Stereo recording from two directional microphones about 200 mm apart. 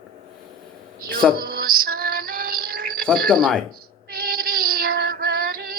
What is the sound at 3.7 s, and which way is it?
Female singing, 50° right (ahead or behind).